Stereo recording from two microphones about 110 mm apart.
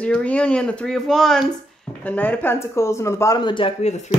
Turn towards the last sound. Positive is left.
turn(degrees=90)